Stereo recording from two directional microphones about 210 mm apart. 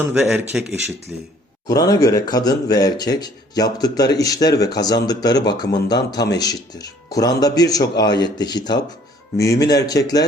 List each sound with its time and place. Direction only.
0.0 s speech: 5° right (ahead or behind)
1.6 s speech: 15° left (ahead or behind)